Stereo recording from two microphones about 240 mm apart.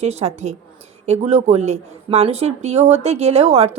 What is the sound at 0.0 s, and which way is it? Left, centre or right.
A woman's voice, right.